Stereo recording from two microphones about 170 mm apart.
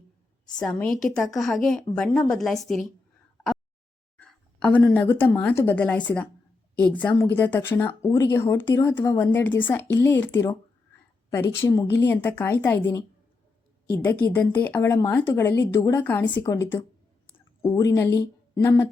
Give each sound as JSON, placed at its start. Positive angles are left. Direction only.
{"t": 0.6, "sound": "a woman's voice", "side_deg": 5}
{"t": 4.6, "sound": "speech", "side_deg": 5}